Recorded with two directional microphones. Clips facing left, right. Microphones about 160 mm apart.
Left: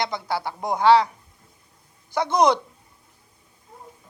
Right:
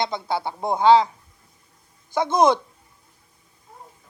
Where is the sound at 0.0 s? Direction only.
20° right (ahead or behind).